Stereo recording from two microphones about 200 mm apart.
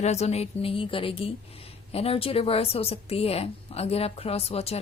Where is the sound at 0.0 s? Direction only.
35° left (ahead or behind).